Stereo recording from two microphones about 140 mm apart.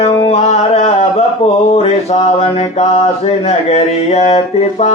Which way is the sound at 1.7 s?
45° left (ahead or behind).